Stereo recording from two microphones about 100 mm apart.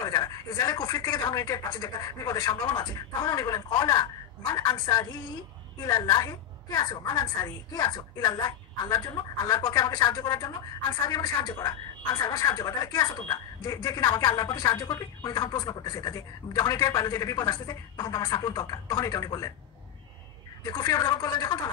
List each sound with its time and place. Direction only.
0.0 s speech: 40° left (ahead or behind)
20.6 s speech: 35° left (ahead or behind)